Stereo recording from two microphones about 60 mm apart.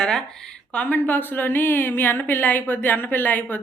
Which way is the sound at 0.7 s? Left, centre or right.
Left.